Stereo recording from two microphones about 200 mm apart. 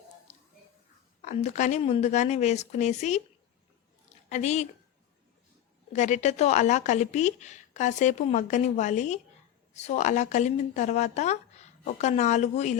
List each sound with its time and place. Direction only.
1.2 s a woman's voice: 35° left (ahead or behind)
4.3 s a woman's voice: 35° left (ahead or behind)
5.9 s a woman's voice: 35° left (ahead or behind)